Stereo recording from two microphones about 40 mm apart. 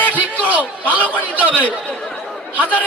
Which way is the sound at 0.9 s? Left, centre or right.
Right.